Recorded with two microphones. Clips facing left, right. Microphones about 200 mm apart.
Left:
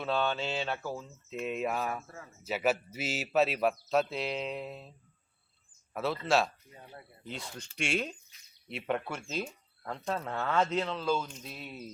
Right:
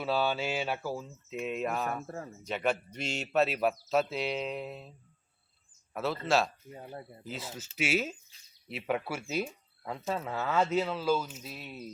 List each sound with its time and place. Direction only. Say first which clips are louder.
0.0 s speech: right 1 dB; 5° right (ahead or behind)
2.0 s speech: right 8 dB; 40° right (ahead or behind)
2.4 s speech: left 2 dB; 5° left (ahead or behind)
5.9 s speech: even; centre (ahead or behind)
6.7 s speech: right 7 dB; 40° right (ahead or behind)
7.3 s speech: even; 5° right (ahead or behind)